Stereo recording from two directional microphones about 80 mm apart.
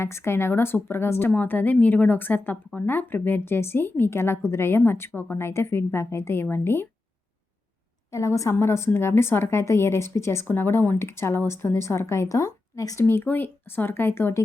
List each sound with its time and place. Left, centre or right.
0.0 s speech: left
8.1 s speech: left
13.1 s speech: left